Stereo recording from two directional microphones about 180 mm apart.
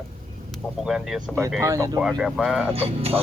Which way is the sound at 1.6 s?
20° right (ahead or behind).